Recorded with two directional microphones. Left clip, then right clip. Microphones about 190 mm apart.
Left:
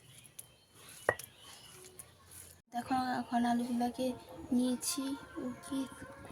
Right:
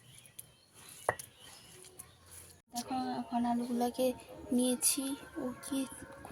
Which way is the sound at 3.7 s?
10° right (ahead or behind).